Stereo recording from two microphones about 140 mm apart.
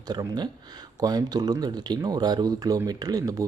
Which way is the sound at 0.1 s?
30° right (ahead or behind).